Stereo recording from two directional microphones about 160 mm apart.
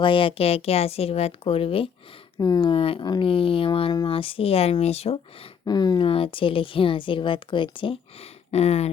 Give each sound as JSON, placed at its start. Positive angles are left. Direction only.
{"t": 0.0, "sound": "speech", "side_deg": 35}
{"t": 5.6, "sound": "speech", "side_deg": 25}